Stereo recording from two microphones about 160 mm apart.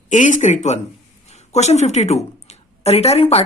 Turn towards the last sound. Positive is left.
turn(degrees=40)  # may be behind; listen again after turning